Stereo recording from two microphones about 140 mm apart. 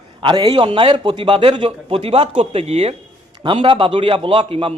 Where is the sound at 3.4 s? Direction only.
35° right (ahead or behind).